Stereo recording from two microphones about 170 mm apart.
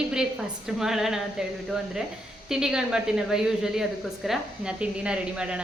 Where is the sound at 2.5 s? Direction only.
5° right (ahead or behind).